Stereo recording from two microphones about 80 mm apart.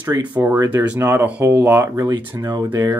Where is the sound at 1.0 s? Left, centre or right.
Right.